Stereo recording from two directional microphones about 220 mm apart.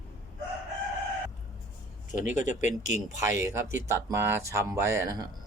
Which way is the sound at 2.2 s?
35° left (ahead or behind).